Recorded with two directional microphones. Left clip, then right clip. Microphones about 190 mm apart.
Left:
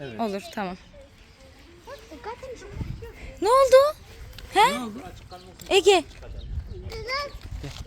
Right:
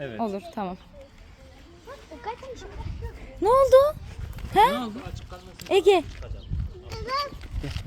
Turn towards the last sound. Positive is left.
turn(degrees=-30)  # may be behind; listen again after turning